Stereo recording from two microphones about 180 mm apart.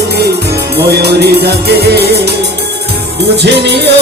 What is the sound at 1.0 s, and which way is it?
Music, 65° right (ahead or behind).